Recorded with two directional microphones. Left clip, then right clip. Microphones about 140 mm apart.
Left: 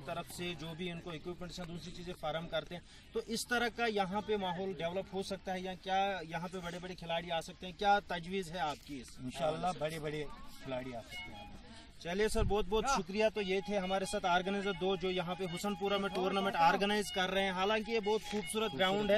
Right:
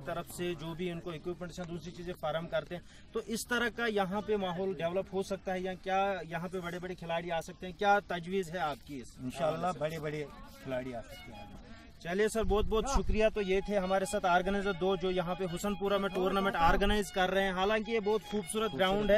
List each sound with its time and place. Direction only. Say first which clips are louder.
0.0 s speech: right 4 dB; 5° right (ahead or behind)
7.8 s speech: right 3 dB; 15° right (ahead or behind)
9.3 s a man's voice: right 3 dB; centre (ahead or behind)
12.0 s speech: right 3 dB; 20° right (ahead or behind)